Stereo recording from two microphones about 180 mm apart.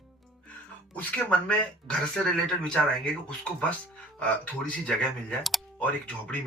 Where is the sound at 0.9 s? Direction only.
5° left (ahead or behind).